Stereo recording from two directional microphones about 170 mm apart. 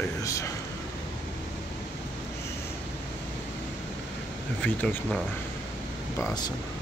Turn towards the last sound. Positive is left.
turn(degrees=20)  # may be behind; listen again after turning